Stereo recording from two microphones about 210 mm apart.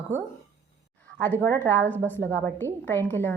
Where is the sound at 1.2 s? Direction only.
10° left (ahead or behind).